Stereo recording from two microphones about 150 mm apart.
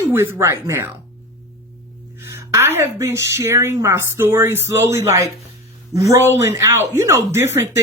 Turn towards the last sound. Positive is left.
turn(degrees=-20)  # may be behind; listen again after turning